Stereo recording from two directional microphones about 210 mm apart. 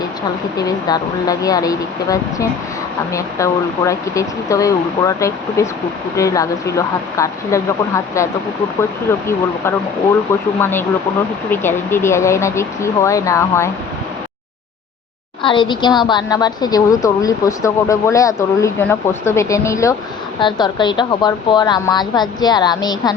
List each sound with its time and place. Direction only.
0.5 s speech: 15° left (ahead or behind)
15.4 s a woman's voice: 20° left (ahead or behind)